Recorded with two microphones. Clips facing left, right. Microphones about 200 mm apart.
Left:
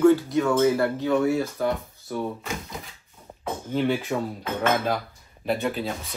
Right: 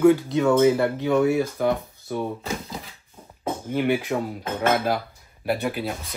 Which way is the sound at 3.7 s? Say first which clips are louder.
Right 1 dB; 10° right (ahead or behind).